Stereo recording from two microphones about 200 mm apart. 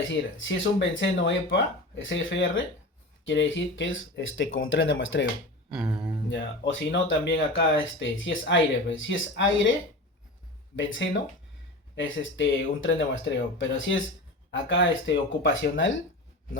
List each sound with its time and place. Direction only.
0.3 s speech: 65° left (ahead or behind)
5.9 s speech: 20° right (ahead or behind)
6.2 s speech: 65° left (ahead or behind)
10.8 s speech: 70° left (ahead or behind)